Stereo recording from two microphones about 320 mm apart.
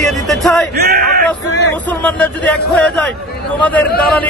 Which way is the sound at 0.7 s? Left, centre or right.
Right.